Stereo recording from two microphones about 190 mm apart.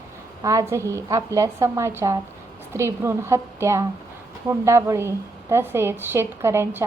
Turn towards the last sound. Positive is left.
turn(degrees=-10)  # may be behind; listen again after turning